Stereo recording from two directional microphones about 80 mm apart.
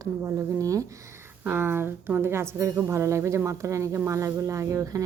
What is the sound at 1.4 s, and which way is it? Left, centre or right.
A woman's voice, right.